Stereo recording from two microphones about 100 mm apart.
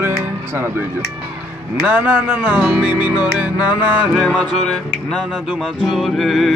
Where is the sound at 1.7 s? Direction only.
15° right (ahead or behind).